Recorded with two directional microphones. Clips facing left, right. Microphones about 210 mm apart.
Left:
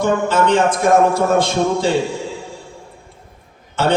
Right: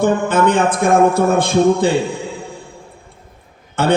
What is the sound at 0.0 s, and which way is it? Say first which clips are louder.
A man's voice: right 2 dB; 55° right (ahead or behind).